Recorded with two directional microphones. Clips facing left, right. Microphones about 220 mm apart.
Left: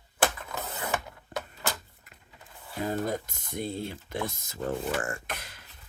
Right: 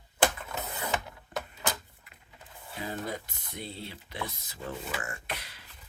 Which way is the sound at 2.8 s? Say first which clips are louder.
Left 6 dB; 45° left (ahead or behind).